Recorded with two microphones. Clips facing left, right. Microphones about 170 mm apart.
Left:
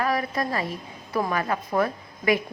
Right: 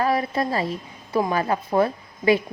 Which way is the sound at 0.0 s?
25° right (ahead or behind).